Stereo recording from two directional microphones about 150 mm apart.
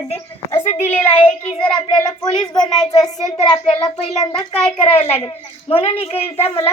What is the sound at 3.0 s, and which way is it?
Speech, 5° left (ahead or behind).